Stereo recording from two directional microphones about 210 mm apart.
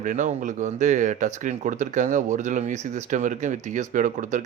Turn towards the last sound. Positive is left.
turn(degrees=-35)  # may be behind; listen again after turning